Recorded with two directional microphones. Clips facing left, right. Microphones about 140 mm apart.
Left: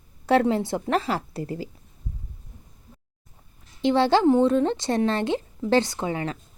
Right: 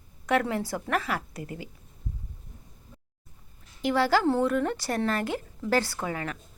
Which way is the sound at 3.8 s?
25° left (ahead or behind).